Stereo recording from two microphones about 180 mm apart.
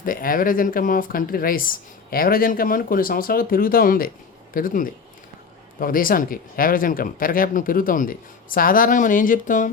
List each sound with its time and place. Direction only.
0.0 s speech: 50° left (ahead or behind)